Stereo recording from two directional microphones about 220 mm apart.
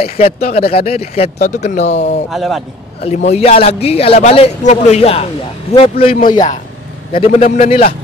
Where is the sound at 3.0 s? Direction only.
30° left (ahead or behind).